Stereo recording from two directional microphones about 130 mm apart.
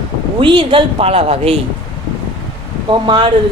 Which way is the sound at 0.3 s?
40° right (ahead or behind).